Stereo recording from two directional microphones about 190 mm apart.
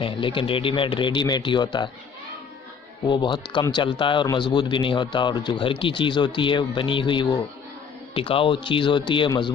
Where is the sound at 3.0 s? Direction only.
25° left (ahead or behind).